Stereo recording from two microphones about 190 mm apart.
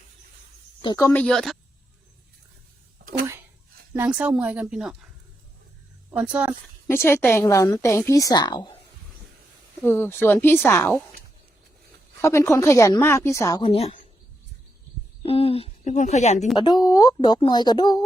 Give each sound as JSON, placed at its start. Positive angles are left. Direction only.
{"t": 0.8, "sound": "a woman's voice", "side_deg": 20}
{"t": 1.2, "sound": "speech", "side_deg": 0}
{"t": 3.0, "sound": "a sound", "side_deg": -50}
{"t": 3.9, "sound": "speech", "side_deg": -10}
{"t": 6.1, "sound": "speech", "side_deg": -5}
{"t": 6.8, "sound": "a woman's voice", "side_deg": 15}
{"t": 9.8, "sound": "a woman's voice", "side_deg": 10}
{"t": 12.2, "sound": "a woman's voice", "side_deg": 15}
{"t": 13.6, "sound": "speech", "side_deg": 30}
{"t": 15.2, "sound": "speech", "side_deg": 30}
{"t": 16.6, "sound": "speech", "side_deg": 20}